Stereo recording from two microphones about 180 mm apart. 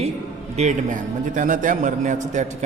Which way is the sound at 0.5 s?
40° right (ahead or behind).